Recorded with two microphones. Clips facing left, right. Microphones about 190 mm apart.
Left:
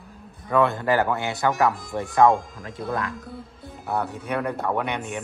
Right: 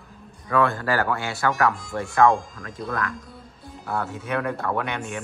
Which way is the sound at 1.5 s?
5° left (ahead or behind).